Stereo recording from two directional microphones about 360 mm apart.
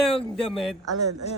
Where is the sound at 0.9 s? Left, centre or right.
Right.